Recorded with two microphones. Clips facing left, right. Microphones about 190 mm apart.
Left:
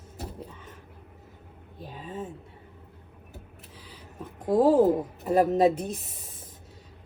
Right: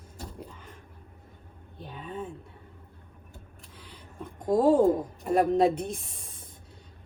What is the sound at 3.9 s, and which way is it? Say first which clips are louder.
Speech: even; 5° left (ahead or behind).